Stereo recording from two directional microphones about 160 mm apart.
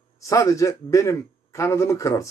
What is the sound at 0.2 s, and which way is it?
Speech, 20° left (ahead or behind).